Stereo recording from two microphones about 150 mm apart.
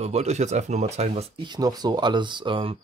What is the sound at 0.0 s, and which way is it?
Speech, 45° right (ahead or behind).